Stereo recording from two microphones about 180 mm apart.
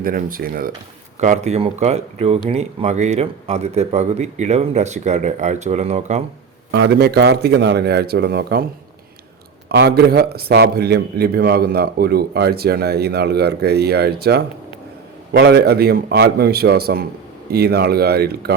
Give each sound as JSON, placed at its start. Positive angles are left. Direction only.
{"t": 0.0, "sound": "speech", "side_deg": -50}
{"t": 1.2, "sound": "a man's voice", "side_deg": -40}
{"t": 6.7, "sound": "a man's voice", "side_deg": -70}
{"t": 9.6, "sound": "a man's voice", "side_deg": -60}